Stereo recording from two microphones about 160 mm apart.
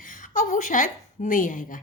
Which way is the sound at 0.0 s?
55° left (ahead or behind).